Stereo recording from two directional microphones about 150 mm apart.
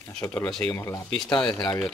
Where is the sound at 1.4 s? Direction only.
Centre (ahead or behind).